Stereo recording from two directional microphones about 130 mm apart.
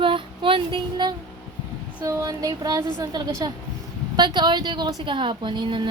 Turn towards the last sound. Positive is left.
turn(degrees=-40)  # may be behind; listen again after turning